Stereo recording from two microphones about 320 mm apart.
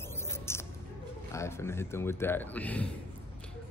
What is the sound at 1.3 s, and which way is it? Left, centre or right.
A man's voice, centre.